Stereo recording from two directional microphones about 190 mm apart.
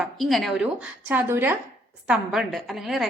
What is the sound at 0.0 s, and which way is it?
A woman's voice, centre (ahead or behind).